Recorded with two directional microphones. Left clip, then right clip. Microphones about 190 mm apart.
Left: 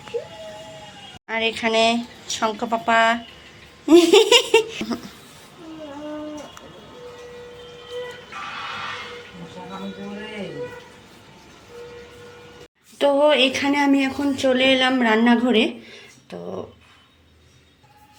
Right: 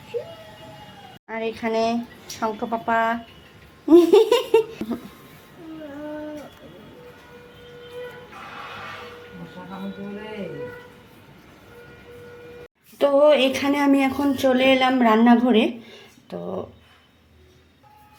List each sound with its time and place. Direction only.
1.3 s laughter: centre (ahead or behind)
13.0 s speech: 5° right (ahead or behind)